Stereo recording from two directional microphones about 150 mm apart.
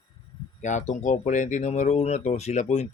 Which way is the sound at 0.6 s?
55° left (ahead or behind).